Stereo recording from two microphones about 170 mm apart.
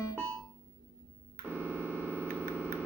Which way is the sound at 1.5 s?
15° right (ahead or behind).